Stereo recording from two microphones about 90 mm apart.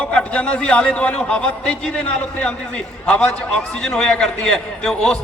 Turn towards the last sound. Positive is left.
turn(degrees=5)  # may be behind; listen again after turning